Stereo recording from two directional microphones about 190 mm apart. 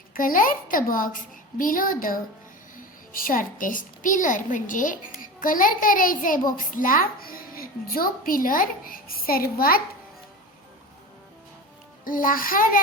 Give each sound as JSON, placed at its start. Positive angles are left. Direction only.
{"t": 0.1, "sound": "a woman's voice", "side_deg": 45}
{"t": 12.0, "sound": "a woman's voice", "side_deg": 45}